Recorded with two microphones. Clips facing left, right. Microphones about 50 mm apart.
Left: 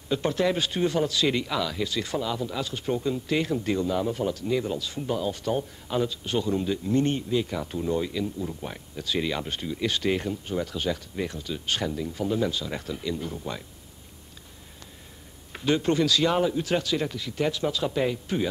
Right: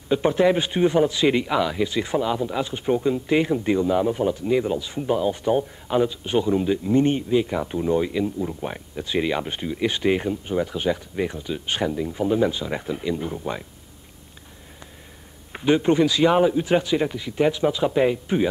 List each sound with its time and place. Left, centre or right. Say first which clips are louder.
0.1 s speech: right 6 dB; right
15.5 s speech: right 5 dB; right